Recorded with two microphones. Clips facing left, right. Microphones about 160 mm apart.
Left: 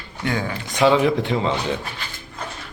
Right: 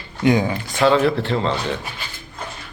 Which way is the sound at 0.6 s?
15° left (ahead or behind).